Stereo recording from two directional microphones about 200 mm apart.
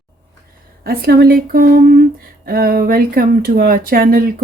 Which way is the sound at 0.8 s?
50° right (ahead or behind).